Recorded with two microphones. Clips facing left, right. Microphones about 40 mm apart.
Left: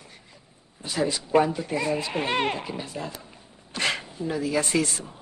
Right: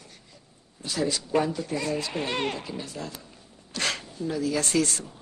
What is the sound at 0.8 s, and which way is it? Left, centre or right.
Speech, centre.